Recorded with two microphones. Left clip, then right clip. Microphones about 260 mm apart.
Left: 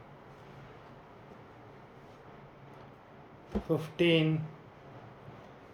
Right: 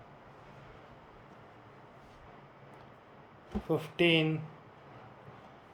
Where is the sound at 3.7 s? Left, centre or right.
Centre.